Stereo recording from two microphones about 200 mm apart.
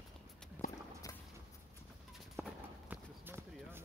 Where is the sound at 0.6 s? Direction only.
40° left (ahead or behind).